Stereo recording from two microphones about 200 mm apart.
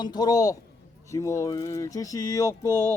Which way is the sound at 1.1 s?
15° left (ahead or behind).